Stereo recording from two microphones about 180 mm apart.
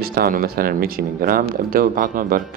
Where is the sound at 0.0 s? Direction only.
55° right (ahead or behind).